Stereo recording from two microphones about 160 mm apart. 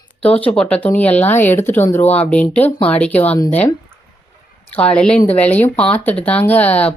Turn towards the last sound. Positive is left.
turn(degrees=10)  # may be behind; listen again after turning